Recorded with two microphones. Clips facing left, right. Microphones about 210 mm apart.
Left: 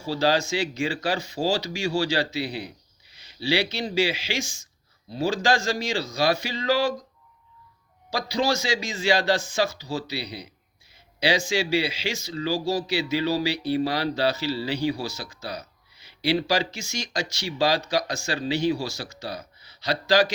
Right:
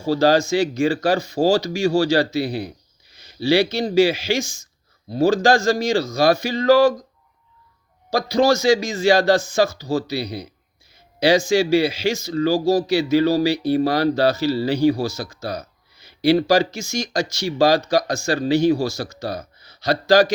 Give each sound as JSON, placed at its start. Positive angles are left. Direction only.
{"t": 0.0, "sound": "speech", "side_deg": -45}
{"t": 8.1, "sound": "speech", "side_deg": -45}